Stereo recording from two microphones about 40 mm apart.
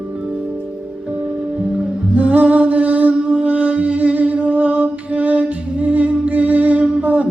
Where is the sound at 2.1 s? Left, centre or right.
Right.